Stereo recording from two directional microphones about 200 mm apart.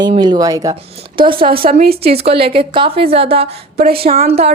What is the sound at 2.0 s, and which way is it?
A woman's voice, 30° right (ahead or behind).